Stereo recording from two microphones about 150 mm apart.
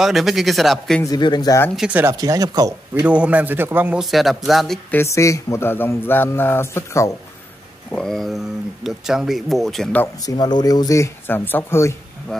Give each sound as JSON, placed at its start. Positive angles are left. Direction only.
{"t": 0.0, "sound": "speech", "side_deg": 0}
{"t": 1.0, "sound": "speech", "side_deg": 25}
{"t": 1.8, "sound": "a man's voice", "side_deg": -10}
{"t": 2.1, "sound": "speech", "side_deg": -25}
{"t": 3.1, "sound": "a man's voice", "side_deg": -10}
{"t": 4.0, "sound": "speech", "side_deg": 0}
{"t": 4.9, "sound": "speech", "side_deg": 20}
{"t": 7.9, "sound": "speech", "side_deg": 5}
{"t": 10.2, "sound": "speech", "side_deg": 30}
{"t": 12.3, "sound": "speech", "side_deg": 5}